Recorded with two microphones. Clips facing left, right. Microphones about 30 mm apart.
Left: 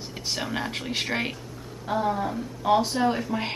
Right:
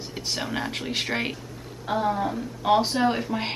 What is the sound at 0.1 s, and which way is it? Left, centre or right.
Speech, centre.